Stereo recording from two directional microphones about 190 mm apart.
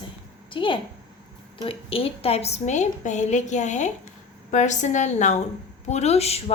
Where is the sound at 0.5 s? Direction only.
25° left (ahead or behind).